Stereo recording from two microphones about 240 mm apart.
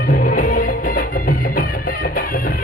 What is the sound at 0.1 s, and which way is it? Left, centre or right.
Music, left.